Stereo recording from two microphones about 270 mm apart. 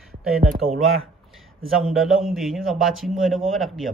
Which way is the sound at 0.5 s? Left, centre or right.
Right.